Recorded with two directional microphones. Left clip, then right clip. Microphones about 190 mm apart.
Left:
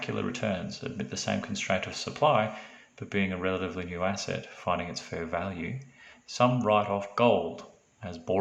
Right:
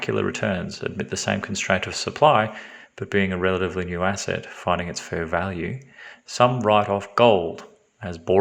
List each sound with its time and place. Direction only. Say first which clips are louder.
0.0 s speech: right 8 dB; 40° right (ahead or behind)